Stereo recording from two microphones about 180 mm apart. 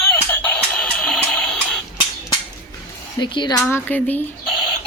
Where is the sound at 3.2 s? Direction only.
25° left (ahead or behind).